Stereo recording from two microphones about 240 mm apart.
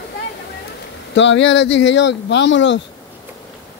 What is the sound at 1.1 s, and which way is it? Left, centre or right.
Speech, left.